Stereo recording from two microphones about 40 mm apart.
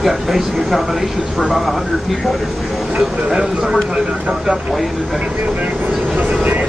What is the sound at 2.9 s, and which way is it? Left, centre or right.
Speech, centre.